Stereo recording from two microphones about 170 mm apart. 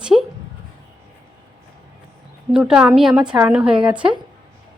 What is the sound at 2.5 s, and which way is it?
Speech, 5° right (ahead or behind).